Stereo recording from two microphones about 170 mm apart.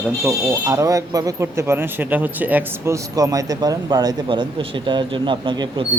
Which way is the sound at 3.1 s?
20° right (ahead or behind).